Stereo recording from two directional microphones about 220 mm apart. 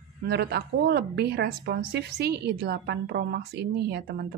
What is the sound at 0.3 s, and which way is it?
A woman's voice, 50° right (ahead or behind).